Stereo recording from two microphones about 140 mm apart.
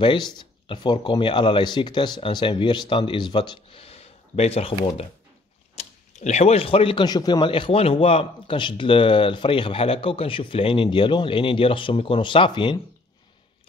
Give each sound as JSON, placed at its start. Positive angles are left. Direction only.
{"t": 0.0, "sound": "speech", "side_deg": 35}